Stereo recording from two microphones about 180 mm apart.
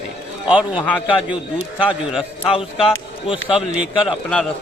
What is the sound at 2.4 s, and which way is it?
Speech, 30° left (ahead or behind).